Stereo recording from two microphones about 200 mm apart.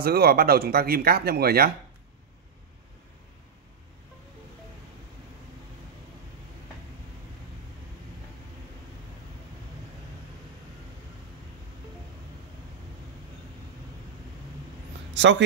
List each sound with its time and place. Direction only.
0.0 s speech: 50° right (ahead or behind)
15.1 s speech: 65° right (ahead or behind)